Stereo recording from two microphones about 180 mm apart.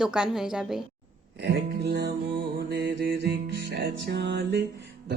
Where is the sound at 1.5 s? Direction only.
65° right (ahead or behind).